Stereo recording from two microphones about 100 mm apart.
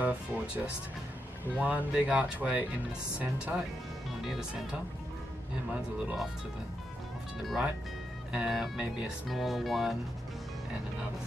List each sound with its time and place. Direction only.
0.0 s speech: 15° right (ahead or behind)
4.2 s speech: centre (ahead or behind)
7.4 s speech: 5° right (ahead or behind)